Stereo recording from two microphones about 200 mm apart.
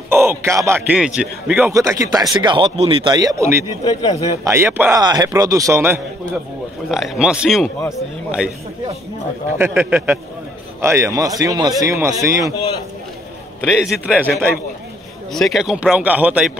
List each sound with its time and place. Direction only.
0.1 s a man's voice: 10° right (ahead or behind)
3.8 s a man's voice: 20° left (ahead or behind)
4.5 s a man's voice: 10° right (ahead or behind)
6.9 s a man's voice: 5° right (ahead or behind)
9.6 s a man's voice: 10° right (ahead or behind)
13.6 s a man's voice: centre (ahead or behind)